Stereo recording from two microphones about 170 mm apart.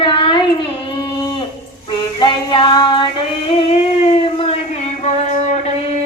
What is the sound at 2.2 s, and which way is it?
Female singing, 30° left (ahead or behind).